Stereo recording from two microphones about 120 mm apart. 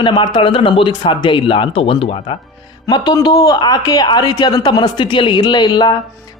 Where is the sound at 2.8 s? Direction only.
35° left (ahead or behind).